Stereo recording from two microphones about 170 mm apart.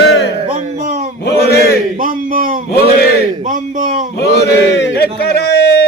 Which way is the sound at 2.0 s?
55° right (ahead or behind).